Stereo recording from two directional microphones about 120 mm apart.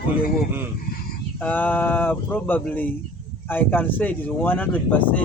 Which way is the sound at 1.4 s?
15° left (ahead or behind).